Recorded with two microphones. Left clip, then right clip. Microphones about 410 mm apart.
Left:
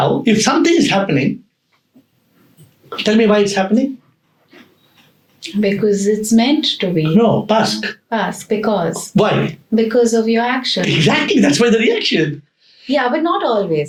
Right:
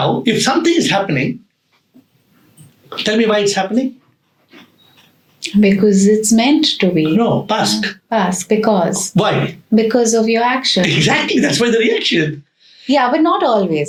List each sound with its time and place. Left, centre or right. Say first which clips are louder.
0.2 s speech: left 1 dB; left
3.0 s speech: left 1 dB; centre
5.4 s speech: right 3 dB; right
7.2 s speech: left 2 dB; centre
8.1 s speech: right 3 dB; right
10.8 s speech: right 1 dB; centre
12.9 s speech: right 3 dB; right